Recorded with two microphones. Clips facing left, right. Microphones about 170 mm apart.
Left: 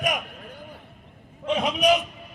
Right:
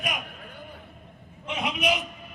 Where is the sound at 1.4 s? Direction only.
40° left (ahead or behind).